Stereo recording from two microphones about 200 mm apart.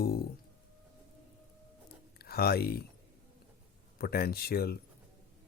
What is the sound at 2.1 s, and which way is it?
Speech, 50° left (ahead or behind).